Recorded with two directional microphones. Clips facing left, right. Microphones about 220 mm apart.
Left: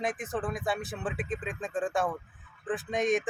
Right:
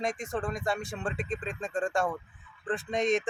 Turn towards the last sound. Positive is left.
turn(degrees=0)  # may be behind; listen again after turning